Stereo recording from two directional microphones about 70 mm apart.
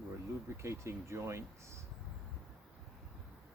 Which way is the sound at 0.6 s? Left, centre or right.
Right.